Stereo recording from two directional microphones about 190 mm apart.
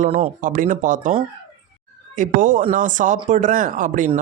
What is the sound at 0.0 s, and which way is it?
Speech, 40° right (ahead or behind).